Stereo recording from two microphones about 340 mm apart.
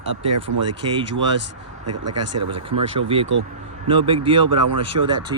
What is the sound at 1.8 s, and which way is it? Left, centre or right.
Speech, right.